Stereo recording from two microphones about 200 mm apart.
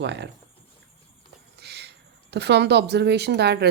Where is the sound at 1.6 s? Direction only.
55° right (ahead or behind).